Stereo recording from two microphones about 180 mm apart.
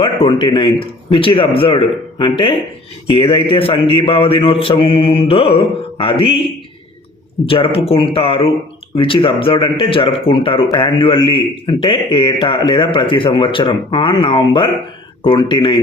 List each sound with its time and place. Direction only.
0.0 s speech: 25° left (ahead or behind)
7.4 s speech: 30° left (ahead or behind)